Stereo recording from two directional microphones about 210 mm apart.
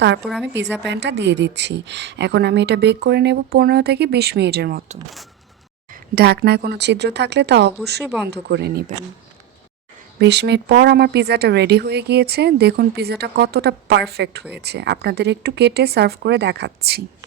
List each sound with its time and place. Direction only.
0.2 s speech: centre (ahead or behind)
0.9 s speech: 55° right (ahead or behind)
5.9 s speech: 50° right (ahead or behind)
10.2 s speech: 55° right (ahead or behind)